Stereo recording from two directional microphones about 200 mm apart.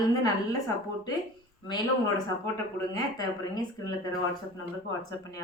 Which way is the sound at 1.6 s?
20° left (ahead or behind).